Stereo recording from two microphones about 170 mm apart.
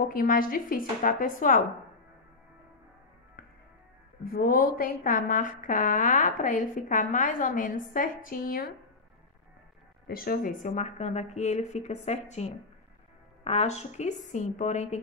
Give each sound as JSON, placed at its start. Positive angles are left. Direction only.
{"t": 0.1, "sound": "speech", "side_deg": 55}
{"t": 3.4, "sound": "music", "side_deg": 60}
{"t": 4.2, "sound": "a woman's voice", "side_deg": 60}
{"t": 10.0, "sound": "a woman's voice", "side_deg": 60}